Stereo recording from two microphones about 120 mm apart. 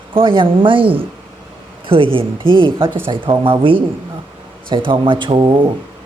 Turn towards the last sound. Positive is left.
turn(degrees=-40)  # may be behind; listen again after turning